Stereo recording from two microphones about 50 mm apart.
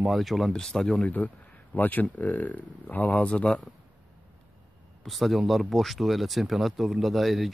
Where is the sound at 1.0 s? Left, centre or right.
Left.